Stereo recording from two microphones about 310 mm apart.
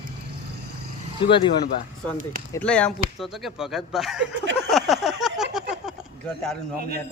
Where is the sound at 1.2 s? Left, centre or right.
Centre.